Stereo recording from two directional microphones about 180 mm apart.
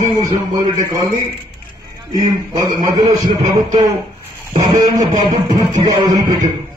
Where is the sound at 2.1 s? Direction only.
20° right (ahead or behind).